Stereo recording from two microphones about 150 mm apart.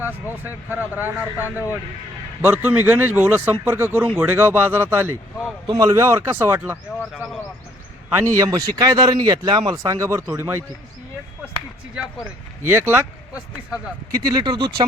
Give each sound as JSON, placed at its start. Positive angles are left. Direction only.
{"t": 0.4, "sound": "speech", "side_deg": -10}
{"t": 7.0, "sound": "speech", "side_deg": 0}
{"t": 8.1, "sound": "speech", "side_deg": -20}
{"t": 12.7, "sound": "speech", "side_deg": -15}